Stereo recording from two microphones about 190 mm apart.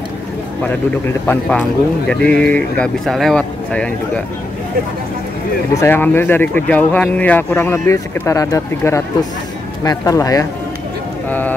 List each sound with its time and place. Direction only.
1.2 s speech: 10° left (ahead or behind)
5.8 s speech: 10° left (ahead or behind)